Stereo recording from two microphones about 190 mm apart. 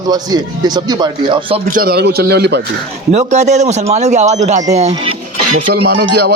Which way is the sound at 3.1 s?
35° right (ahead or behind).